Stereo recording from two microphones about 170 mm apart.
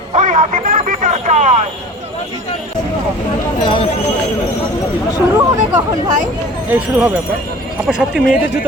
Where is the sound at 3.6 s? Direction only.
30° left (ahead or behind).